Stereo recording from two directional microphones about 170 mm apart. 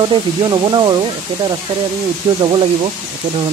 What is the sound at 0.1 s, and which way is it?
Speech, 25° right (ahead or behind).